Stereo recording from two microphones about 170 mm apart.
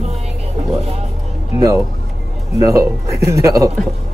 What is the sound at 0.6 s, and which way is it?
Speech, 40° right (ahead or behind).